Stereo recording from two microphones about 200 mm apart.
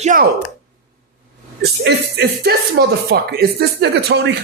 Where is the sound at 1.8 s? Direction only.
55° right (ahead or behind).